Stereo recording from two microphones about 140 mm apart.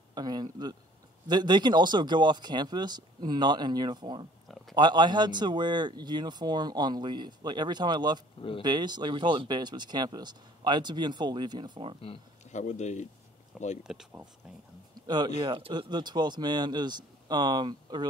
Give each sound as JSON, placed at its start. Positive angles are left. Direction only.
{"t": 0.1, "sound": "a man's voice", "side_deg": -30}
{"t": 8.4, "sound": "speech", "side_deg": 40}
{"t": 8.6, "sound": "speech", "side_deg": -30}
{"t": 12.0, "sound": "speech", "side_deg": 50}
{"t": 13.8, "sound": "speech", "side_deg": -5}
{"t": 15.0, "sound": "speech", "side_deg": -30}